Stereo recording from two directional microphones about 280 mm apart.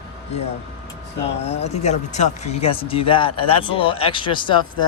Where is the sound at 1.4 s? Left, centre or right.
Left.